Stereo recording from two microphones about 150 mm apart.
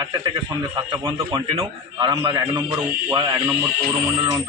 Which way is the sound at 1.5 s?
25° right (ahead or behind).